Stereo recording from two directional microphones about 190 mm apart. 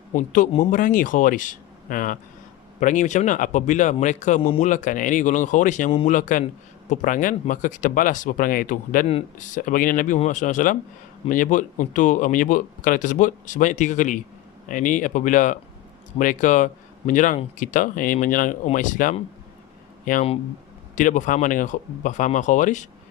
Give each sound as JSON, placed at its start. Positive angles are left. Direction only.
{"t": 0.1, "sound": "a man's voice", "side_deg": 40}